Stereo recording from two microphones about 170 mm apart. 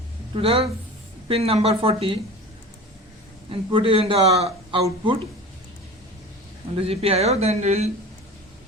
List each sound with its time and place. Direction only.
0.3 s a man's voice: 35° right (ahead or behind)
3.5 s a man's voice: 30° right (ahead or behind)
6.7 s a man's voice: 35° right (ahead or behind)